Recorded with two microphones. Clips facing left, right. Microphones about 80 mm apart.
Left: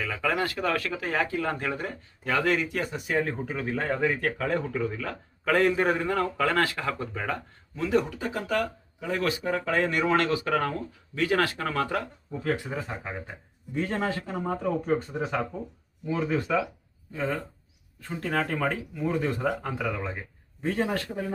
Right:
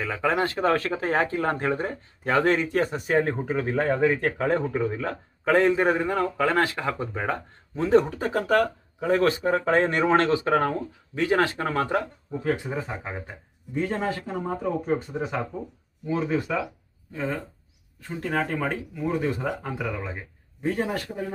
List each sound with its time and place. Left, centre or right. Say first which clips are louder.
0.0 s speech: right 3 dB; right
16.3 s speech: left 1 dB; centre
18.1 s speech: right 1 dB; centre
19.4 s speech: left 1 dB; centre